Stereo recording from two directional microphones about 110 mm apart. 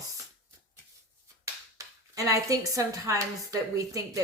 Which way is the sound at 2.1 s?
30° right (ahead or behind).